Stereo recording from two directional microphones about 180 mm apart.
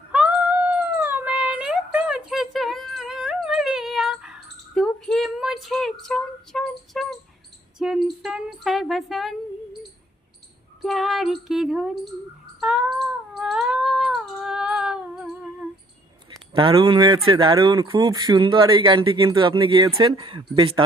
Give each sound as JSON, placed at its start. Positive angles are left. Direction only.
{"t": 0.1, "sound": "a sound", "side_deg": -5}
{"t": 10.8, "sound": "female singing", "side_deg": 0}
{"t": 12.5, "sound": "cat", "side_deg": -5}
{"t": 16.5, "sound": "speech", "side_deg": -30}